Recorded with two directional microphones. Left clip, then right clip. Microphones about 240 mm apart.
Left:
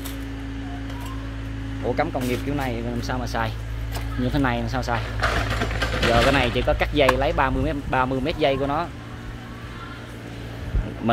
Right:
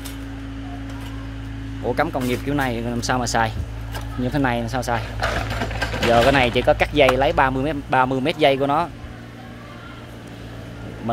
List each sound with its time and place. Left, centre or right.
1.9 s speech: centre
5.2 s a sound: right
6.1 s speech: centre